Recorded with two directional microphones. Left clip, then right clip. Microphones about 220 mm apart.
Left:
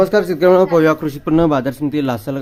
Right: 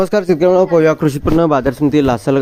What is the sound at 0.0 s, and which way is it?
Speech, 40° right (ahead or behind).